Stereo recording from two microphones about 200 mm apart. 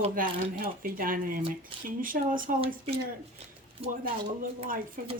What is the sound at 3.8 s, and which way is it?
Speech, 30° right (ahead or behind).